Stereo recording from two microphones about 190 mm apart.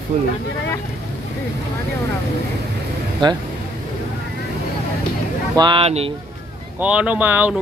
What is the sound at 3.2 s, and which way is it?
Speech, 25° right (ahead or behind).